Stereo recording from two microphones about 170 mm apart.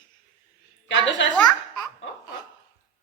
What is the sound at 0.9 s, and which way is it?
Speech, 90° left.